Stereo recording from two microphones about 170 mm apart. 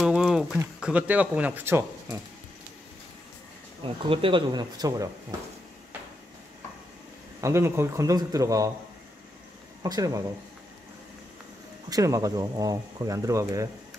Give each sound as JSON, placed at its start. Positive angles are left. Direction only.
{"t": 0.0, "sound": "a sound", "side_deg": -5}
{"t": 0.7, "sound": "speech", "side_deg": -5}
{"t": 3.8, "sound": "speech", "side_deg": -30}
{"t": 7.4, "sound": "speech", "side_deg": -15}
{"t": 9.8, "sound": "speech", "side_deg": -20}
{"t": 11.9, "sound": "speech", "side_deg": -20}